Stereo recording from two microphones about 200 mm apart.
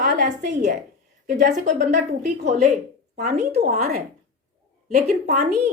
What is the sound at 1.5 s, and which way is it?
A woman's voice, 40° right (ahead or behind).